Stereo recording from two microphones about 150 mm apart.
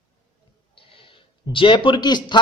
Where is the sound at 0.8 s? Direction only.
35° left (ahead or behind).